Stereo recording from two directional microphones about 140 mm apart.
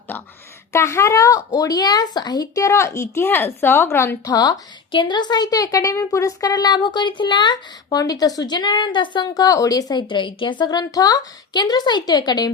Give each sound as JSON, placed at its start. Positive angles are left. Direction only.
{"t": 0.1, "sound": "a woman's voice", "side_deg": 15}
{"t": 4.3, "sound": "a woman's voice", "side_deg": 25}